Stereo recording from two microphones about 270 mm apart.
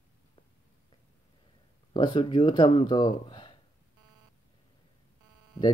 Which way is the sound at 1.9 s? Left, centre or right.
Centre.